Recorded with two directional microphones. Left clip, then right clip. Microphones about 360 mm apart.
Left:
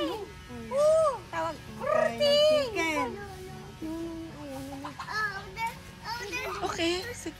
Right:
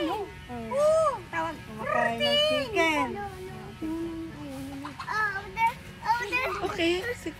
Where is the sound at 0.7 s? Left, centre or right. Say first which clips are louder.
Even; centre.